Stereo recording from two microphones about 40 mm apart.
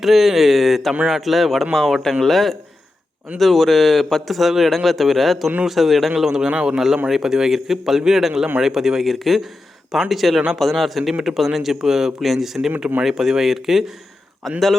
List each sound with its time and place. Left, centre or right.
0.0 s a man's voice: centre
6.5 s speech: right
6.7 s a man's voice: centre
11.1 s a man's voice: centre
14.4 s a man's voice: centre